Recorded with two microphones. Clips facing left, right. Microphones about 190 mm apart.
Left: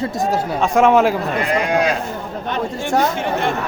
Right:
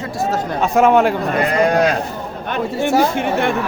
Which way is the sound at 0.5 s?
Centre (ahead or behind).